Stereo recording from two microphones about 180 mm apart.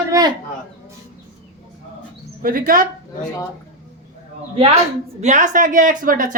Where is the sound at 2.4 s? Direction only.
50° right (ahead or behind).